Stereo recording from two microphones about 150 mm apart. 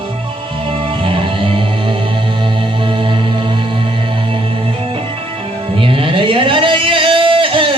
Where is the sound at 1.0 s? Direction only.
35° right (ahead or behind).